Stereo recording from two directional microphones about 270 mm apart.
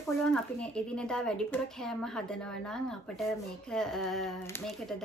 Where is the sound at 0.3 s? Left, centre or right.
Centre.